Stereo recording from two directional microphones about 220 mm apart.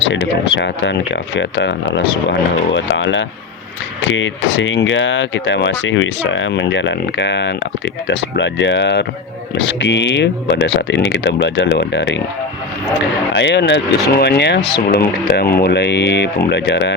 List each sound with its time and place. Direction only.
0.1 s speech: 55° left (ahead or behind)
2.7 s speech: 55° left (ahead or behind)
13.3 s speech: 50° left (ahead or behind)